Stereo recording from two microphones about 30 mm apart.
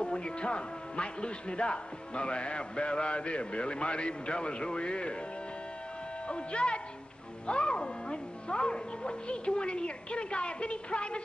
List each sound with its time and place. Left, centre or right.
0.0 s a man's voice: left
6.2 s a man's voice: left